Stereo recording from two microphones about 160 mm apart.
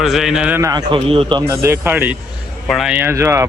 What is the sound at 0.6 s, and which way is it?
Speech, 25° right (ahead or behind).